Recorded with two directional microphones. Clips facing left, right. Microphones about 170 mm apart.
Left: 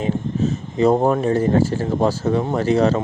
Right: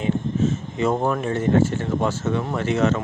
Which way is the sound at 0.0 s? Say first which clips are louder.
Left 1 dB; 35° left (ahead or behind).